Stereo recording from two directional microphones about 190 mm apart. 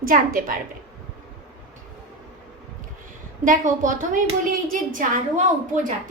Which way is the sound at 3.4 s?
40° right (ahead or behind).